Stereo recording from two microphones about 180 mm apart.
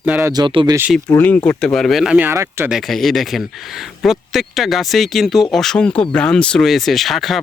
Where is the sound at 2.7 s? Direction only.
Centre (ahead or behind).